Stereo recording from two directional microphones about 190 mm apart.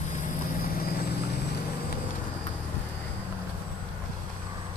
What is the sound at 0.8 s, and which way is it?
Vehicle, 50° left (ahead or behind).